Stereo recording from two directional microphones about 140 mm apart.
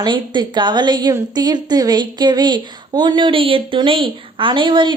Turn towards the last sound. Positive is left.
turn(degrees=-35)  # may be behind; listen again after turning